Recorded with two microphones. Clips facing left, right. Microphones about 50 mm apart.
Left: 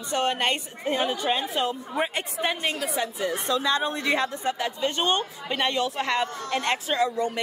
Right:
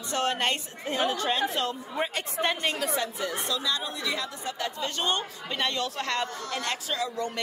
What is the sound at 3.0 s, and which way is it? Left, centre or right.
A woman's voice, left.